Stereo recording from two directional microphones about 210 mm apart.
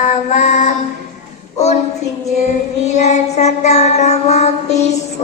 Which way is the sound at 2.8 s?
30° left (ahead or behind).